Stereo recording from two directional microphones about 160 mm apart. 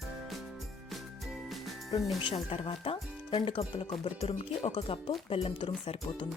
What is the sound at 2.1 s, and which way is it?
Speech, 35° left (ahead or behind).